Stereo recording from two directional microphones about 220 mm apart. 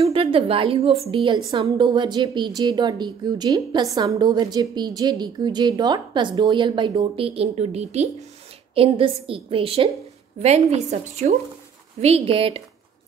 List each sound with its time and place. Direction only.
0.0 s a woman's voice: 25° right (ahead or behind)